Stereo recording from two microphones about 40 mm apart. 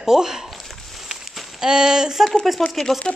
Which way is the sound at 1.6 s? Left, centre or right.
Centre.